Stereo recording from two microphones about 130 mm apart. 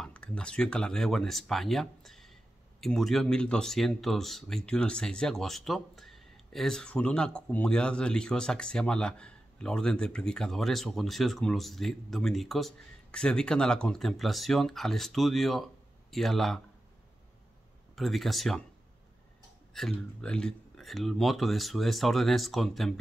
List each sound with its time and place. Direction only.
0.0 s speech: 10° left (ahead or behind)
17.9 s speech: centre (ahead or behind)
19.7 s speech: 5° left (ahead or behind)